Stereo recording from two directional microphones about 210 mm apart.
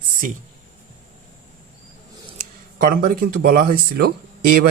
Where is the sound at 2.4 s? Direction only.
40° right (ahead or behind).